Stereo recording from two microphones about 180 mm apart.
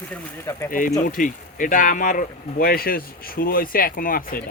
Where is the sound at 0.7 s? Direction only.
50° left (ahead or behind).